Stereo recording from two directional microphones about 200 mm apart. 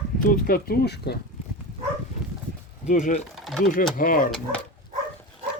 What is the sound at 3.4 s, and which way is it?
Speech, centre (ahead or behind).